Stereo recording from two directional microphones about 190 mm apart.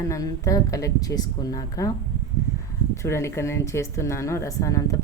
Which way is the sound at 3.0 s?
15° left (ahead or behind).